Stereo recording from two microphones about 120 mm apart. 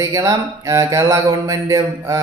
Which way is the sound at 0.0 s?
25° right (ahead or behind).